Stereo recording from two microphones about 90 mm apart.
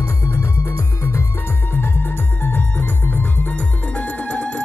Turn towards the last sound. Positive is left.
turn(degrees=10)  # may be behind; listen again after turning